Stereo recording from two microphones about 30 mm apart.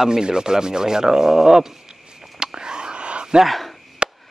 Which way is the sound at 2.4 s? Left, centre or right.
Right.